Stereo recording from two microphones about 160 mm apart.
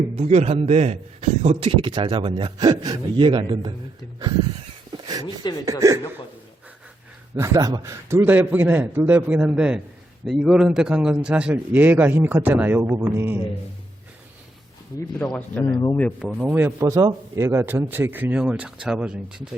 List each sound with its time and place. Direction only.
0.2 s a man's voice: 40° right (ahead or behind)
4.9 s a sound: 25° right (ahead or behind)
5.4 s speech: 25° left (ahead or behind)
5.8 s a man's voice: 20° right (ahead or behind)
7.3 s a man's voice: 20° right (ahead or behind)
15.3 s speech: 10° left (ahead or behind)
15.6 s speech: 25° left (ahead or behind)
16.0 s speech: 10° left (ahead or behind)
16.3 s a man's voice: 5° right (ahead or behind)
16.8 s a man's voice: 25° right (ahead or behind); by 19.5 s 5° right (ahead or behind)